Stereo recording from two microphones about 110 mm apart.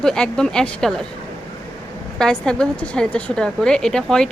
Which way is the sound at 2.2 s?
5° left (ahead or behind).